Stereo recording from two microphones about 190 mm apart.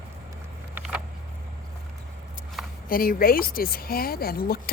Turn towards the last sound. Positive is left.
turn(degrees=50)  # may be behind; listen again after turning